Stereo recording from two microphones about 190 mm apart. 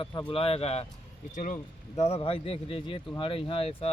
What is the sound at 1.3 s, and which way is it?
Speech, 45° left (ahead or behind).